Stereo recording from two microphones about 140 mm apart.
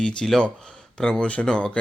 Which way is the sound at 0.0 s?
5° left (ahead or behind).